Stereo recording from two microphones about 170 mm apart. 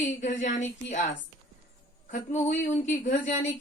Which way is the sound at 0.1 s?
45° left (ahead or behind).